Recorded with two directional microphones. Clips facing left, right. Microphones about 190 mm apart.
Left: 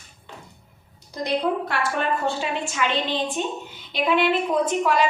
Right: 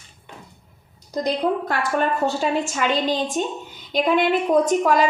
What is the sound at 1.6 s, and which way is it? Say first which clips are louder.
A woman's voice: right 3 dB; 40° right (ahead or behind).